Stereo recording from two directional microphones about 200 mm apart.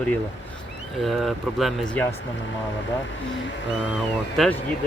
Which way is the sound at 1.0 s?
Centre (ahead or behind).